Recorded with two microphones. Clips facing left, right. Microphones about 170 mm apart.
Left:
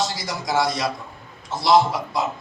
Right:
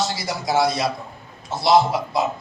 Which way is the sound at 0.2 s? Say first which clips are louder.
Right 2 dB; 25° right (ahead or behind).